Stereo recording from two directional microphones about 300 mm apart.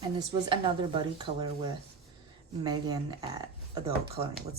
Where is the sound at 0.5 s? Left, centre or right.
Centre.